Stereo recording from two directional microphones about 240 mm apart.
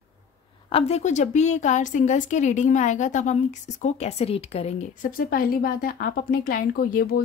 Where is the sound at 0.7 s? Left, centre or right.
Left.